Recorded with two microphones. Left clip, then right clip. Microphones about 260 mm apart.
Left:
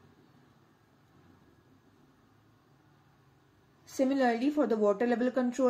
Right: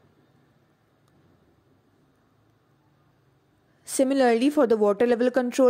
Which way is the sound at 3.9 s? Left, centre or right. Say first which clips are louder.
Right 8 dB; right.